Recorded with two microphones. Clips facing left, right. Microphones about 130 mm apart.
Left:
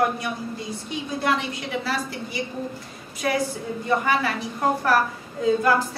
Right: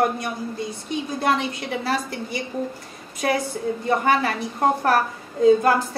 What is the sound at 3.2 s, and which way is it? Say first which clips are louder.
A woman's voice: right 2 dB; 40° right (ahead or behind).